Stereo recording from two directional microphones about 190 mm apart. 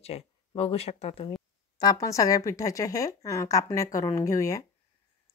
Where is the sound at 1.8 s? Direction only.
20° left (ahead or behind).